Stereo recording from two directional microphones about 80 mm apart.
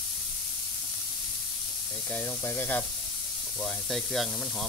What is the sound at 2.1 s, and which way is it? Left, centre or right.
Speech, left.